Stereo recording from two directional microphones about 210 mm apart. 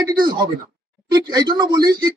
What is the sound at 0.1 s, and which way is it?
A man's voice, 20° right (ahead or behind).